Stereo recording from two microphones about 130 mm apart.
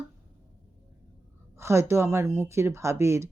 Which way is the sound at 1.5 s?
20° right (ahead or behind).